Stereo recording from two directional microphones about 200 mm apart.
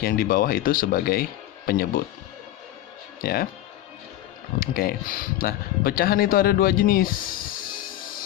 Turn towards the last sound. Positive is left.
turn(degrees=45)  # may be behind; listen again after turning